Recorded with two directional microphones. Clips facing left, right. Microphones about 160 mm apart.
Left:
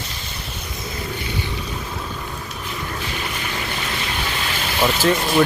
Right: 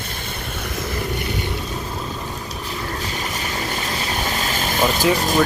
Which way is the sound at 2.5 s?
40° right (ahead or behind).